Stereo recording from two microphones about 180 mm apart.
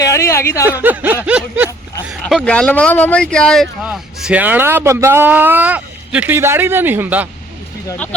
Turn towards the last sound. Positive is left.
turn(degrees=-10)  # may be behind; listen again after turning